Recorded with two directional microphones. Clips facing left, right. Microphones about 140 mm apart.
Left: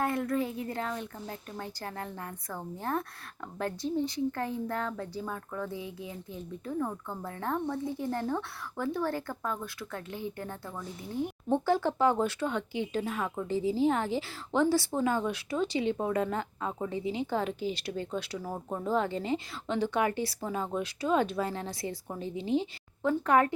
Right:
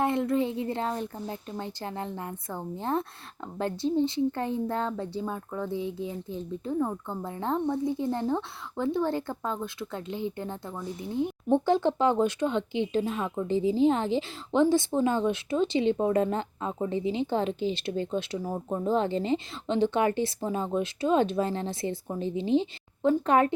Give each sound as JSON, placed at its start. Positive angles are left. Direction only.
{"t": 0.0, "sound": "speech", "side_deg": -25}